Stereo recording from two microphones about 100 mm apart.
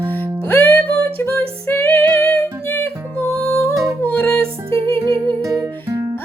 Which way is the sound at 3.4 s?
15° left (ahead or behind).